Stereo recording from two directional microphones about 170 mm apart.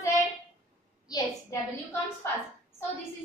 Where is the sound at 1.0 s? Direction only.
20° left (ahead or behind).